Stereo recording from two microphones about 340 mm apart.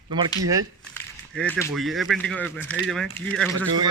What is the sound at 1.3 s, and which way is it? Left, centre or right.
Speech, centre.